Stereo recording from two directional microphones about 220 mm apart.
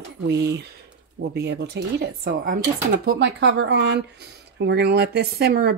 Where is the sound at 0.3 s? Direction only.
50° right (ahead or behind).